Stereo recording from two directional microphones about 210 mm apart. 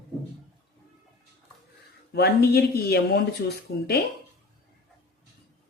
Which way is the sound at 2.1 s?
50° left (ahead or behind).